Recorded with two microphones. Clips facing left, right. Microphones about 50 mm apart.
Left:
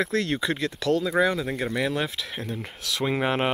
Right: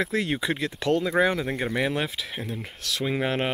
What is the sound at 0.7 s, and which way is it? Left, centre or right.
Speech, right.